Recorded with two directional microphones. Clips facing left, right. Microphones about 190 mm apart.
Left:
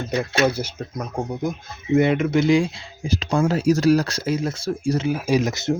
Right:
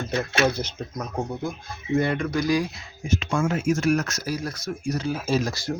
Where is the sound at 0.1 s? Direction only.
15° left (ahead or behind); by 5.0 s 30° left (ahead or behind).